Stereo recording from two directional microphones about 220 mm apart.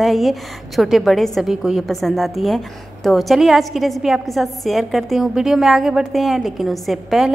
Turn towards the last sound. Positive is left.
turn(degrees=0)  # may be behind; listen again after turning